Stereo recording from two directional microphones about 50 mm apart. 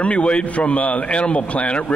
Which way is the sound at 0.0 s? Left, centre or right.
Left.